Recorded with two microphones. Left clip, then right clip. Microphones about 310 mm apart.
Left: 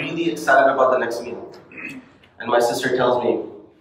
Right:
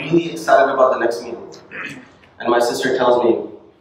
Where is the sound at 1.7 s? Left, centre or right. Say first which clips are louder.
Right 5 dB; right.